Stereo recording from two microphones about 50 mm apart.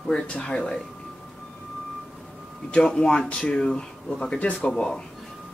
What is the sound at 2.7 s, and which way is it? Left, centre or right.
Speech, centre.